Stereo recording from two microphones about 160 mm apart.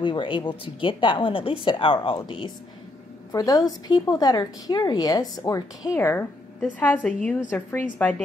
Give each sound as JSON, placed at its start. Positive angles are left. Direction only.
{"t": 0.0, "sound": "a woman's voice", "side_deg": 30}